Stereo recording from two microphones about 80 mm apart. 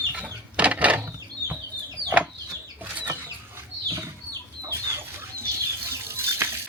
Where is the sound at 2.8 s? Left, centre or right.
Right.